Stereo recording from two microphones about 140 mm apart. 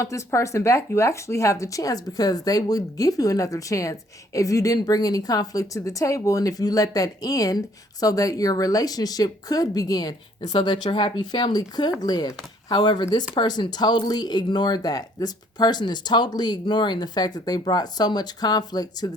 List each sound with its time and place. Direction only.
0.0 s speech: 20° left (ahead or behind)